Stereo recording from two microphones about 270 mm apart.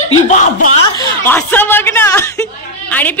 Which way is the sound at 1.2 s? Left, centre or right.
Centre.